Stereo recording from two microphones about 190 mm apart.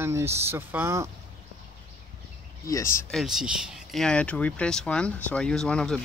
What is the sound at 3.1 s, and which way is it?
Speech, centre (ahead or behind).